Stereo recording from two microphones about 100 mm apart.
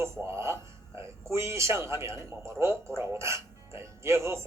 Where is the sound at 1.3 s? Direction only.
30° right (ahead or behind).